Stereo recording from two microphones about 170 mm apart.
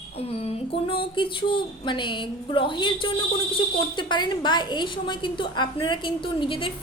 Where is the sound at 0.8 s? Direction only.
30° left (ahead or behind).